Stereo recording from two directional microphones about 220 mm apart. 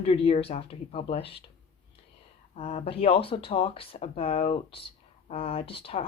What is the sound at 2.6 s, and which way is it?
A woman's voice, 25° left (ahead or behind).